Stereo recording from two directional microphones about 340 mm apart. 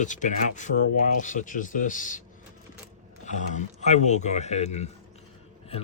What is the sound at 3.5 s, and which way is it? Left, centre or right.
Speech, centre.